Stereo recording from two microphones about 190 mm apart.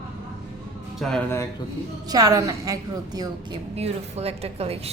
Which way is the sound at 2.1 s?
20° right (ahead or behind).